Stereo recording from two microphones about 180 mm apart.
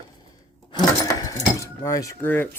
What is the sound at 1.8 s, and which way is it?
Speech, 20° left (ahead or behind).